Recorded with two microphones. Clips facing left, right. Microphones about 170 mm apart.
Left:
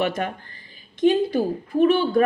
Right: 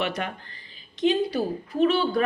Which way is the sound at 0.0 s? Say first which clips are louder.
Left 4 dB; 45° left (ahead or behind).